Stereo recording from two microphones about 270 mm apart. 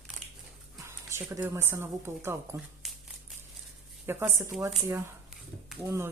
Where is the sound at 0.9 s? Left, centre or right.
Centre.